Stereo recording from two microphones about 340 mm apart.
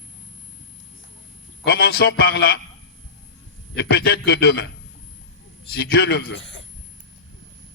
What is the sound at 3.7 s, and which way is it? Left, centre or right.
Speech, left.